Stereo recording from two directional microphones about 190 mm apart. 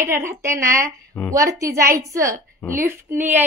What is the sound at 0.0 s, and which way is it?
A woman's voice, 15° right (ahead or behind).